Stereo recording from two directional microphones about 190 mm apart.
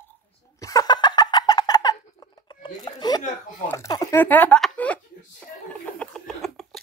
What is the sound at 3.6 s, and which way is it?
Speech, 15° left (ahead or behind).